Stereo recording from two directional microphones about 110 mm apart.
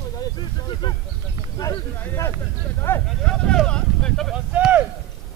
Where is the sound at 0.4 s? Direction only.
40° left (ahead or behind).